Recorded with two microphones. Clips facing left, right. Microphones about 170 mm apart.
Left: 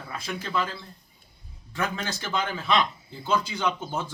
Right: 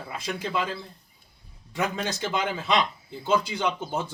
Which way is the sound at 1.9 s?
20° right (ahead or behind).